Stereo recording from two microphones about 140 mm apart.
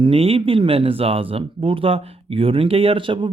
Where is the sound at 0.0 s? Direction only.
40° right (ahead or behind).